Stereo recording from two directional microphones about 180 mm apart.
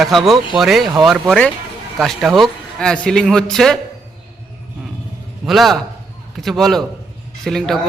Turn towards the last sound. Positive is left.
turn(degrees=0)  # may be behind; listen again after turning